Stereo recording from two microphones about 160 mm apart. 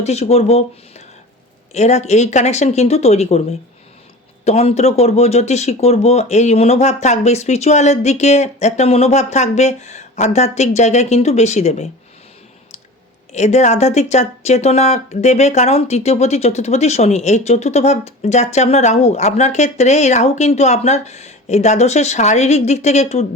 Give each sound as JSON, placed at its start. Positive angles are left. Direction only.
{"t": 0.0, "sound": "speech", "side_deg": 40}
{"t": 4.4, "sound": "speech", "side_deg": 40}
{"t": 13.3, "sound": "speech", "side_deg": 45}